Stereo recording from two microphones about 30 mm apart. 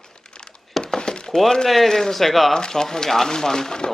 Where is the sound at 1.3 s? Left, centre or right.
Centre.